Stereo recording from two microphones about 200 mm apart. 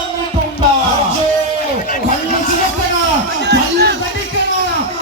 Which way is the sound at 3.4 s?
55° right (ahead or behind).